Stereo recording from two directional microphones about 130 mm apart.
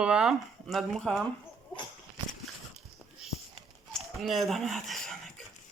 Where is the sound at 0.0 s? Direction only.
5° right (ahead or behind).